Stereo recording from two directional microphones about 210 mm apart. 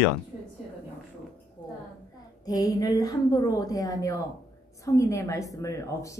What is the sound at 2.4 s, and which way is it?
Speech, 15° left (ahead or behind).